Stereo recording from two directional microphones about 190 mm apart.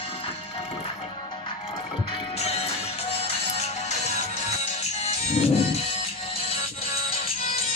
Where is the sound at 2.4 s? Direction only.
35° left (ahead or behind).